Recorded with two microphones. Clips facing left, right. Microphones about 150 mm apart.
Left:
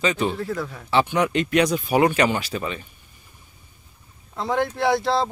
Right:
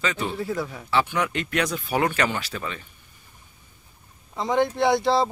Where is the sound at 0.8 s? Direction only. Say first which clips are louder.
Left 4 dB; 20° left (ahead or behind).